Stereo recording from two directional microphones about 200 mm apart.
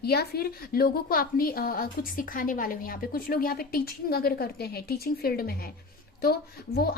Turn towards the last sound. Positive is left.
turn(degrees=50)  # may be behind; listen again after turning